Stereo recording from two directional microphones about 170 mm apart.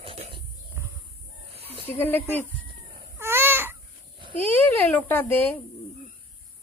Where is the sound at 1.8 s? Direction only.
15° left (ahead or behind).